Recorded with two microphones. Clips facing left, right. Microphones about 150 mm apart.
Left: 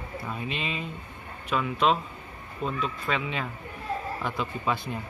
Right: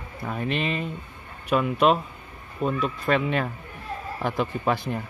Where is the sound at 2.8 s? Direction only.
55° right (ahead or behind).